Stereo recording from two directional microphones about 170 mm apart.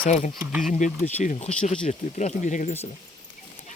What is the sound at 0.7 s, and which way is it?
Speech, 50° left (ahead or behind).